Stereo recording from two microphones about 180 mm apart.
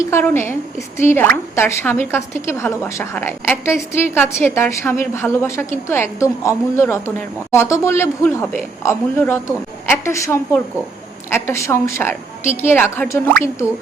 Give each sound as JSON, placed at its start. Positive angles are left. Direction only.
{"t": 0.0, "sound": "a woman's voice", "side_deg": 15}